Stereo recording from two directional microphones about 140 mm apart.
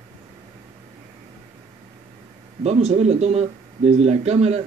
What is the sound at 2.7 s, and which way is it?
A man's voice, 50° right (ahead or behind).